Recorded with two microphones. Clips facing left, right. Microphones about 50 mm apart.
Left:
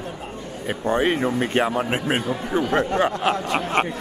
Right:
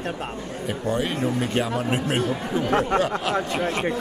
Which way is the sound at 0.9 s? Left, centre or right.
Left.